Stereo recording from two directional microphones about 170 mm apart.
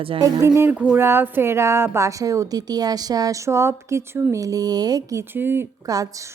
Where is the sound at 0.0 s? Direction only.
25° right (ahead or behind).